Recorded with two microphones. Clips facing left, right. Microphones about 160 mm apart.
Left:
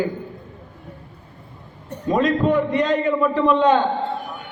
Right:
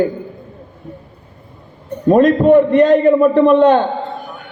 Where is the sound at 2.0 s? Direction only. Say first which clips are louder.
Right 9 dB; 50° right (ahead or behind).